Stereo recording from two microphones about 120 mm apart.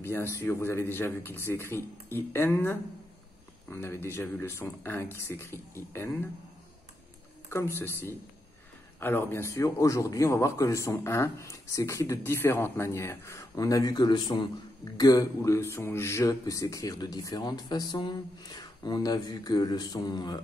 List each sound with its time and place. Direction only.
0.0 s a man's voice: 20° left (ahead or behind)
7.4 s a man's voice: 20° left (ahead or behind); by 20.4 s 35° left (ahead or behind)